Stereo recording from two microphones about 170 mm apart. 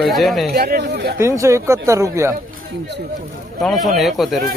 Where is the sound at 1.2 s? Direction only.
15° right (ahead or behind).